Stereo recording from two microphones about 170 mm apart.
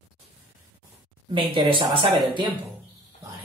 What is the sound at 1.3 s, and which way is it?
Speech, 30° right (ahead or behind).